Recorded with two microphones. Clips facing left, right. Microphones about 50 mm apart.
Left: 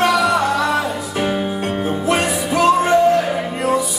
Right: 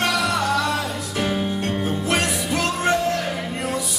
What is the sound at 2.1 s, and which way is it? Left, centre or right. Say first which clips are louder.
Music: left 5 dB; centre.